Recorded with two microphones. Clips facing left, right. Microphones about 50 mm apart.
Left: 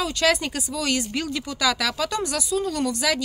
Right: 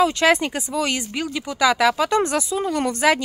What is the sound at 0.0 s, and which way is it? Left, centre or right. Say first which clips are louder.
Speech: right 5 dB; right.